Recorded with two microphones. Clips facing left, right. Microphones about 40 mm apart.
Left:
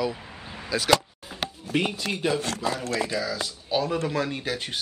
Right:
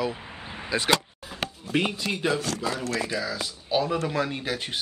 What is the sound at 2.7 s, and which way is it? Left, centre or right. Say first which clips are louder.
Speech: even; left.